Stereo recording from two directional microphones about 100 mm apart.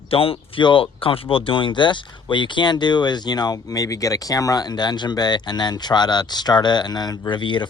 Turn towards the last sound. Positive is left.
turn(degrees=50)  # may be behind; listen again after turning